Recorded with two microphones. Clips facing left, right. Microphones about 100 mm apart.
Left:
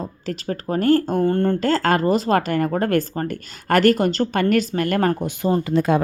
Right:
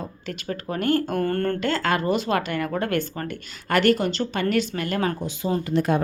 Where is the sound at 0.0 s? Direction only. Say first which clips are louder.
Left 5 dB; 35° left (ahead or behind).